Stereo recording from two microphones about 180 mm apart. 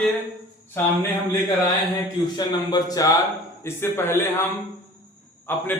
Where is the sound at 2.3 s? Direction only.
20° left (ahead or behind).